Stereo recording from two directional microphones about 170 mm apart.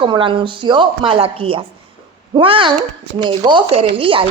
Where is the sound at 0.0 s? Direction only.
30° right (ahead or behind).